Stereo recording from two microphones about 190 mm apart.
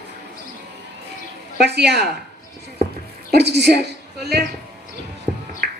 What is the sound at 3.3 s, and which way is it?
Speech, 65° right (ahead or behind).